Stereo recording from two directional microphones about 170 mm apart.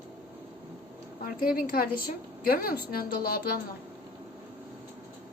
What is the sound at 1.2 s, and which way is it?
A woman's voice, 60° left (ahead or behind).